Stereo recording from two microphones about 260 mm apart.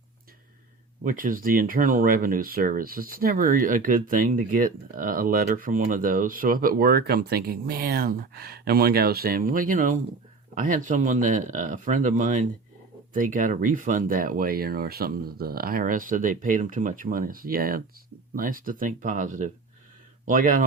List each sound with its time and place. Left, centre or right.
1.0 s speech: right